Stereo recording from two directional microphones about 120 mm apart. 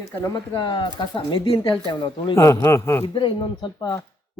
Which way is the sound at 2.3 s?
25° left (ahead or behind).